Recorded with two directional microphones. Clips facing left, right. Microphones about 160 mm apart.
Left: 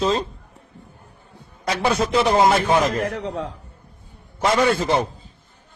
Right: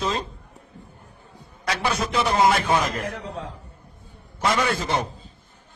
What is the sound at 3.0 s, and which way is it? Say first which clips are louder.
Speech: left 6 dB; 85° left.